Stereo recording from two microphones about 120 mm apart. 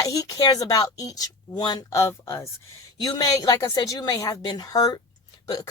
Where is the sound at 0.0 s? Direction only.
30° left (ahead or behind).